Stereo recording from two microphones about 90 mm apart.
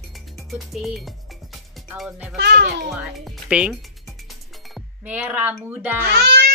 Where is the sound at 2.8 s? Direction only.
Centre (ahead or behind).